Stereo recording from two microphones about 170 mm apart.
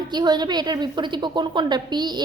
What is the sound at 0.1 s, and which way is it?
A woman's voice, 25° right (ahead or behind).